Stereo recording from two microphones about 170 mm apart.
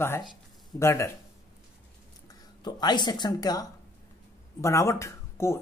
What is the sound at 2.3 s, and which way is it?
Speech, 25° left (ahead or behind).